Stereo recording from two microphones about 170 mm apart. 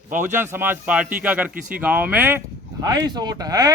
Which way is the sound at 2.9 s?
25° right (ahead or behind).